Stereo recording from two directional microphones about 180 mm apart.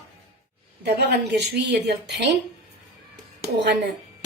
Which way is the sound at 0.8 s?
65° right (ahead or behind).